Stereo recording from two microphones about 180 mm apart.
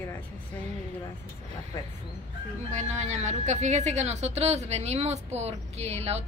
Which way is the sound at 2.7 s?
40° right (ahead or behind).